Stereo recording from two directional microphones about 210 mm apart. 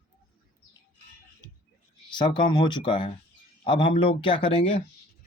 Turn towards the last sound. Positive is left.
turn(degrees=25)  # may be behind; listen again after turning